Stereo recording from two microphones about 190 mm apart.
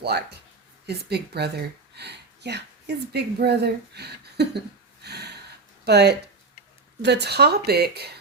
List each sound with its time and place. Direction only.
0.0 s speech: 60° right (ahead or behind)
5.0 s a sound: 60° right (ahead or behind)
5.8 s speech: 60° right (ahead or behind)